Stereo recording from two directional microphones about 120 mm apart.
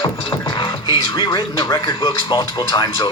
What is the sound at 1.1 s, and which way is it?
Speech, 35° left (ahead or behind).